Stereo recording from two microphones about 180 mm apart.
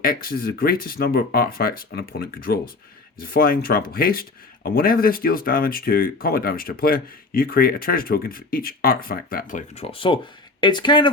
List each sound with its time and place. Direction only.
0.0 s speech: 55° left (ahead or behind); by 11.1 s 25° left (ahead or behind)